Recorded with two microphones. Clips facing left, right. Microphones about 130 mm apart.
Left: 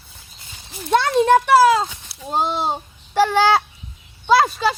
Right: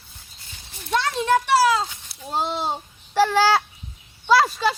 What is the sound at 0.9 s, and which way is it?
A child's voice, 55° left (ahead or behind).